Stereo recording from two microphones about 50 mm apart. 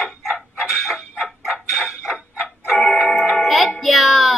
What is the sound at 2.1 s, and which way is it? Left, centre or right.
Fowl, right.